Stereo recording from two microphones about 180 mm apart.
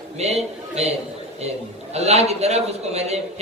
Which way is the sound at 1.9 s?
35° right (ahead or behind).